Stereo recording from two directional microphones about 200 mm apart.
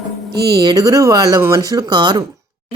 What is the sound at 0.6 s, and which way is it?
A woman's voice, 20° right (ahead or behind).